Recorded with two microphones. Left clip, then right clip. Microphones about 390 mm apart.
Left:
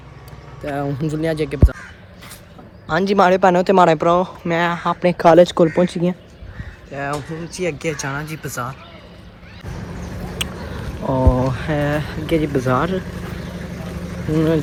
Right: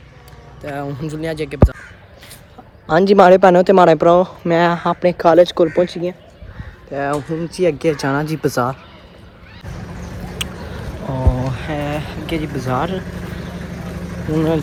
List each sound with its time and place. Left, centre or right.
0.6 s speech: centre
2.8 s speech: centre
5.9 s speech: centre
9.6 s a sound: centre
11.8 s speech: centre
12.6 s speech: centre
12.9 s vehicle: centre